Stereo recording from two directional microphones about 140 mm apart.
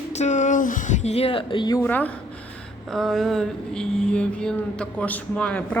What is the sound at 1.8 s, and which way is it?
Speech, 10° left (ahead or behind).